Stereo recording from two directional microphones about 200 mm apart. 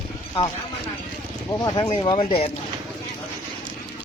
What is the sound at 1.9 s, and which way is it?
Speech, 30° left (ahead or behind).